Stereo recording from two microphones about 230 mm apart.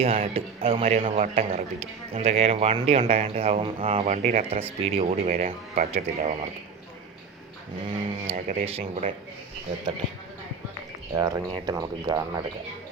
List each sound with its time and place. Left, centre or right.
0.0 s a man's voice: right
7.9 s a man's voice: right
11.2 s speech: centre